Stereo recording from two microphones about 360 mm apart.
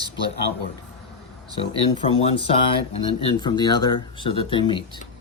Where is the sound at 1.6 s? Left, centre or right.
Centre.